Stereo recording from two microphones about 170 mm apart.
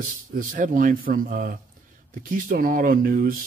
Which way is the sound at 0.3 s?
50° right (ahead or behind).